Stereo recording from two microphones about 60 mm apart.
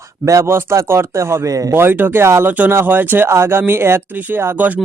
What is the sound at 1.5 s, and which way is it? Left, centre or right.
Speech, right.